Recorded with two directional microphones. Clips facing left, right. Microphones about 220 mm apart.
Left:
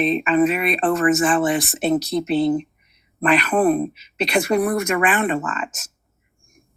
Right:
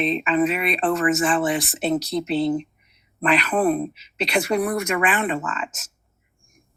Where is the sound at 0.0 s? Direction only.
50° left (ahead or behind).